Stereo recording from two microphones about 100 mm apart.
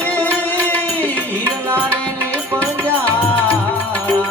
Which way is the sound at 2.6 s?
15° left (ahead or behind).